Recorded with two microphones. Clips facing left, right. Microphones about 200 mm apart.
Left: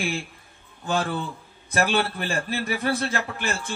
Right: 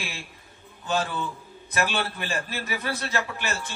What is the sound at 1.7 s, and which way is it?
A man's voice, 50° left (ahead or behind).